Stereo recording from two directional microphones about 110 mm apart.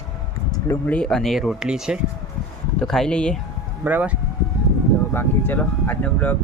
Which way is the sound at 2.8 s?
5° left (ahead or behind).